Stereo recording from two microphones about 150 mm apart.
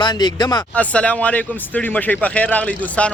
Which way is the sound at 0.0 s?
30° left (ahead or behind).